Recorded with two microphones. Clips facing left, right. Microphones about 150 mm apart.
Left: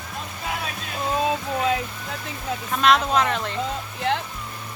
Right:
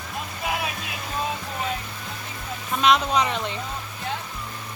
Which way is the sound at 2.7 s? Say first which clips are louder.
Left 1 dB; centre (ahead or behind).